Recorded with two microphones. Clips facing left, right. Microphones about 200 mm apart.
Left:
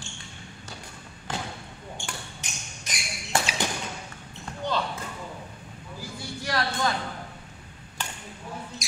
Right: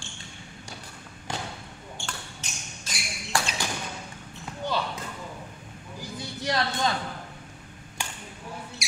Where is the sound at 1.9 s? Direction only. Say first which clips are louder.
Left 1 dB; 15° left (ahead or behind).